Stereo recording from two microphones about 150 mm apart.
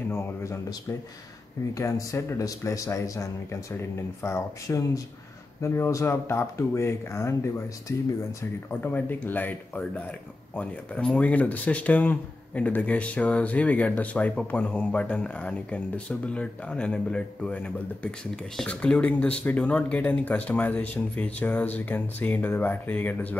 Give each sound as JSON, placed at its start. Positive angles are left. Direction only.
{"t": 0.1, "sound": "speech", "side_deg": 20}
{"t": 8.4, "sound": "speech", "side_deg": 15}